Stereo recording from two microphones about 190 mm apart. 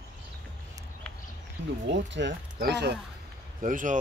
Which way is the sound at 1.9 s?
70° right (ahead or behind).